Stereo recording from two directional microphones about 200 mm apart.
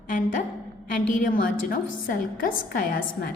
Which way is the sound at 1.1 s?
45° left (ahead or behind).